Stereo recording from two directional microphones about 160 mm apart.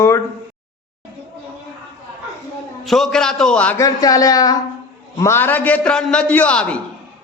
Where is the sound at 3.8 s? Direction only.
20° left (ahead or behind).